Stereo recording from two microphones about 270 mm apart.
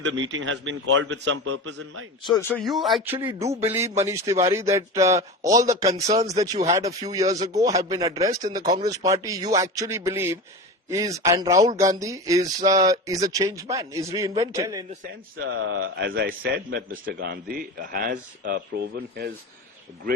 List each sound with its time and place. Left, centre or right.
0.0 s a man's voice: right
2.2 s speech: centre
15.4 s a man's voice: right